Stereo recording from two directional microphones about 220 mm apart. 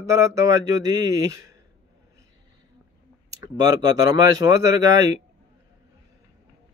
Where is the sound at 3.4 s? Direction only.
15° right (ahead or behind).